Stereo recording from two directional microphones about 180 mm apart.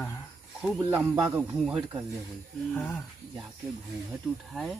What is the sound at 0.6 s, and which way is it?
Speech, 10° right (ahead or behind).